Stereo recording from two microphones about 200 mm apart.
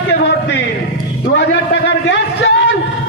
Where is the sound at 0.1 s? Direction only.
60° left (ahead or behind).